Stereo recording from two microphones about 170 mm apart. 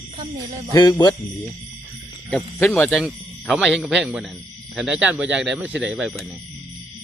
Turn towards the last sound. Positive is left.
turn(degrees=0)  # may be behind; listen again after turning